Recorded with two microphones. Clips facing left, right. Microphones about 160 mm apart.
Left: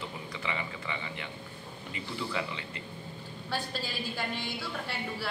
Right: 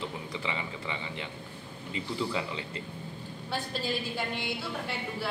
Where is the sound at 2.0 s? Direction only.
25° right (ahead or behind).